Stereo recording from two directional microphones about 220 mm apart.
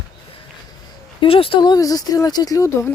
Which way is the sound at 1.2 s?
25° left (ahead or behind).